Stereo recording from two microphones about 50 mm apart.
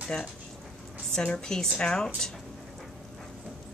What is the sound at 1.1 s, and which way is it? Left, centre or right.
Speech, centre.